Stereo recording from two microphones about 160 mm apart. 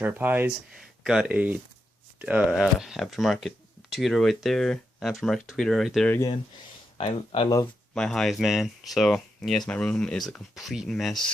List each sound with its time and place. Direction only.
0.0 s speech: 10° right (ahead or behind)
6.1 s speech: 25° left (ahead or behind)
7.0 s speech: 35° left (ahead or behind)
7.9 s speech: 5° left (ahead or behind)